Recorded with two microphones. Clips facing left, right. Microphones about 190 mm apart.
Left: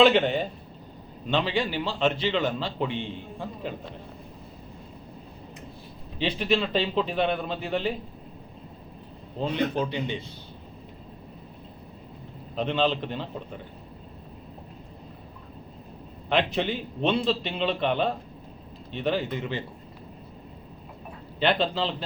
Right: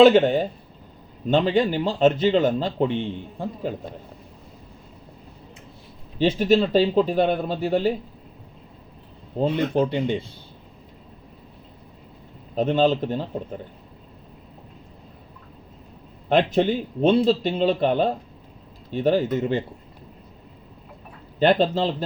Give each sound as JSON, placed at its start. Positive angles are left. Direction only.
{"t": 0.0, "sound": "a man's voice", "side_deg": -45}
{"t": 6.1, "sound": "speech", "side_deg": -45}
{"t": 9.4, "sound": "a man's voice", "side_deg": -50}
{"t": 12.5, "sound": "a man's voice", "side_deg": -45}
{"t": 16.3, "sound": "a man's voice", "side_deg": -45}
{"t": 21.3, "sound": "a man's voice", "side_deg": -45}